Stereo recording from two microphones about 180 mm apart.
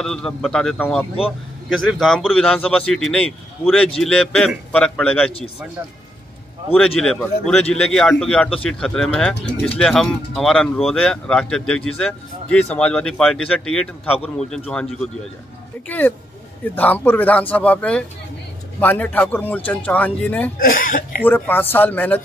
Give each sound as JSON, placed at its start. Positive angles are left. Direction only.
{"t": 0.0, "sound": "a man's voice", "side_deg": 5}
{"t": 7.2, "sound": "a man's voice", "side_deg": 5}
{"t": 16.6, "sound": "speech", "side_deg": 10}
{"t": 20.6, "sound": "speech", "side_deg": 50}
{"t": 21.2, "sound": "speech", "side_deg": 10}